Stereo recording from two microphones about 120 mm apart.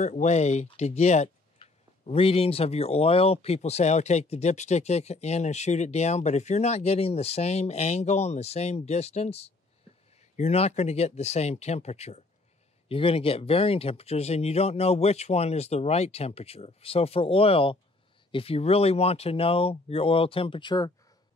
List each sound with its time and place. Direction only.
0.0 s speech: 75° left (ahead or behind)
1.6 s speech: 55° left (ahead or behind)
12.8 s speech: 50° left (ahead or behind)